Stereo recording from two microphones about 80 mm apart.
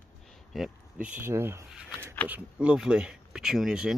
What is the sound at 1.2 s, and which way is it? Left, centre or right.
Speech, right.